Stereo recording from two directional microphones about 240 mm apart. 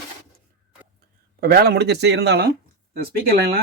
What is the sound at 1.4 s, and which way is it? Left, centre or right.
Speech, right.